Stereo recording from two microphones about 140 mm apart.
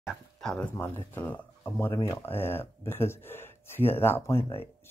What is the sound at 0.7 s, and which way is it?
Speech, 15° left (ahead or behind).